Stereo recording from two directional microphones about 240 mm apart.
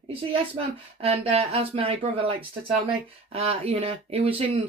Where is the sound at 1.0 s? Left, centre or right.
Right.